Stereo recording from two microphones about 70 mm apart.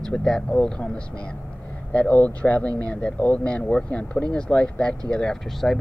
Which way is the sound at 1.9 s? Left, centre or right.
Centre.